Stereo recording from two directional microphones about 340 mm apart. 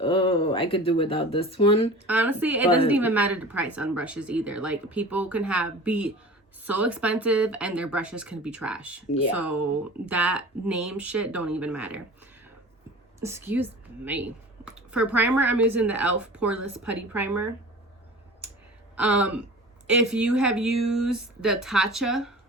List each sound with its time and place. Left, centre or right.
0.0 s speech: centre
2.0 s speech: centre
13.1 s a woman's voice: centre
18.9 s speech: centre